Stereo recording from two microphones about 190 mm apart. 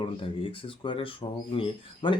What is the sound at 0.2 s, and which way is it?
Speech, 25° left (ahead or behind).